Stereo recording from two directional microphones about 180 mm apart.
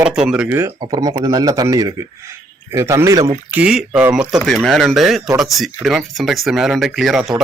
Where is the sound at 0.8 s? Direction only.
20° right (ahead or behind).